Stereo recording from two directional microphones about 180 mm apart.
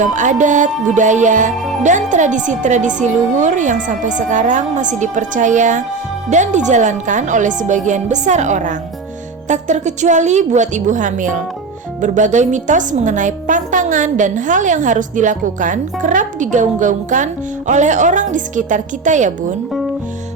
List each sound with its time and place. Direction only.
0.0 s a woman's voice: 45° right (ahead or behind)